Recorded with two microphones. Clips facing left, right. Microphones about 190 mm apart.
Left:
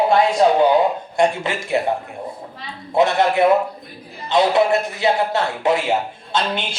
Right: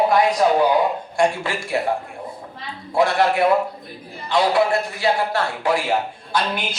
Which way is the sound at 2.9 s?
20° left (ahead or behind).